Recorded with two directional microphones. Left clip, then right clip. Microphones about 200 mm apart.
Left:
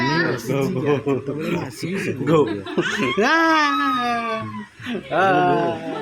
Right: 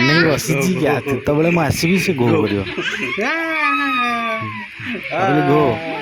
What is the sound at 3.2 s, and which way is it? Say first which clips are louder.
Speech: left 4 dB; 20° left (ahead or behind).